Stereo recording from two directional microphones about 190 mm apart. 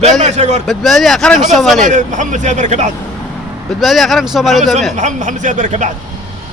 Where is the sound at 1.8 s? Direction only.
40° right (ahead or behind).